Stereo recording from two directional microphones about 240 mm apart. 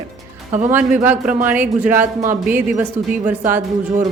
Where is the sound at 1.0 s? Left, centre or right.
Centre.